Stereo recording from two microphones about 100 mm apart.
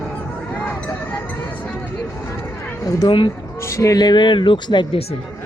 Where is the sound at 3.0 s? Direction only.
55° left (ahead or behind).